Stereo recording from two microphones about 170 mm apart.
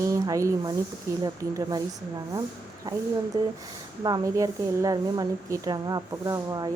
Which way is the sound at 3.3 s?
20° right (ahead or behind).